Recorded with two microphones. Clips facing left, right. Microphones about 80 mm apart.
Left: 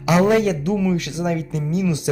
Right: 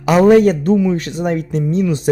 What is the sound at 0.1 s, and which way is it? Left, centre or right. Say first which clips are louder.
A man's voice: right 7 dB; right.